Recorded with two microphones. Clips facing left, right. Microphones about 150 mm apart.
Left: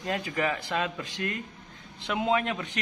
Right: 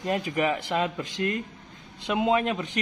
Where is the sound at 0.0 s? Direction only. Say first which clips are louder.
Right 3 dB; 20° right (ahead or behind).